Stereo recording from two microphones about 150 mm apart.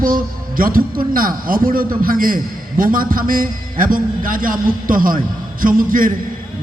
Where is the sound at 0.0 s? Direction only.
70° right (ahead or behind).